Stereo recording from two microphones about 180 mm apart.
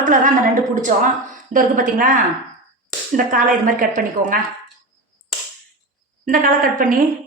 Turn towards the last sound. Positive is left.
turn(degrees=-50)  # may be behind; listen again after turning